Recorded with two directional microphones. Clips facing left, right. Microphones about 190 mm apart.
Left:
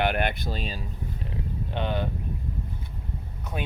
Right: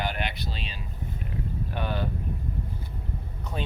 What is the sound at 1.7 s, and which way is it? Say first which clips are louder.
Speech: left 3 dB; 20° left (ahead or behind).